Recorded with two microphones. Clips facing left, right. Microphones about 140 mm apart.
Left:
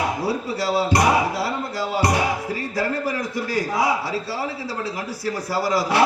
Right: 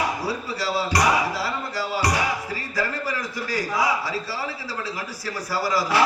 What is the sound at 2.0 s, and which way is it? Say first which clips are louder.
Music: left 4 dB; 55° left (ahead or behind).